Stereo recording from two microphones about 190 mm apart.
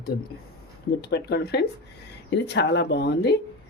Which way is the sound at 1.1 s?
60° left (ahead or behind).